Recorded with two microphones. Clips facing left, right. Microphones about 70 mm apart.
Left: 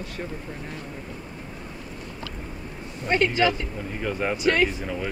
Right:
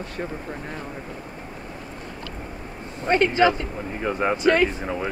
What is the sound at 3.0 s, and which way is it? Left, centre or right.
Speech, right.